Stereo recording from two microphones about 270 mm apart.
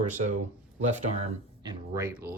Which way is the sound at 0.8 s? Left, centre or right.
Right.